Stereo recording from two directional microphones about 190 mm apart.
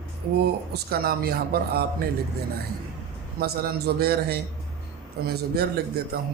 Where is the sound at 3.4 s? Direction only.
55° right (ahead or behind).